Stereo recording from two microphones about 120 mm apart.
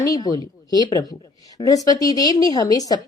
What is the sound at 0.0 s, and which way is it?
Speech, 30° left (ahead or behind).